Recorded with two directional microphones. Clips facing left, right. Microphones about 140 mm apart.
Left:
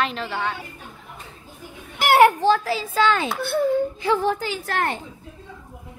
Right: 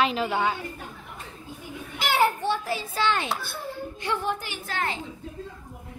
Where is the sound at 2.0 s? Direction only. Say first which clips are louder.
Left 8 dB; 65° left (ahead or behind); by 2.8 s 90° left.